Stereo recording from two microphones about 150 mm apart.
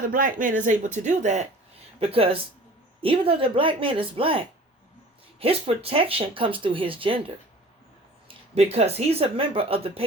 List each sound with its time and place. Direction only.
0.1 s speech: 65° right (ahead or behind)
2.0 s speech: 40° right (ahead or behind)
8.3 s speech: 45° right (ahead or behind)